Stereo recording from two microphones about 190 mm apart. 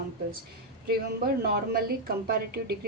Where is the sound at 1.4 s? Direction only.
55° right (ahead or behind).